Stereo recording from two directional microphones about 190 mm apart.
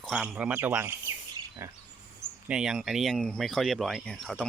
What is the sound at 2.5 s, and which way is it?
Speech, 5° right (ahead or behind).